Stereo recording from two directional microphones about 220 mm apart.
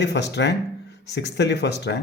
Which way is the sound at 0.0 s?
50° left (ahead or behind).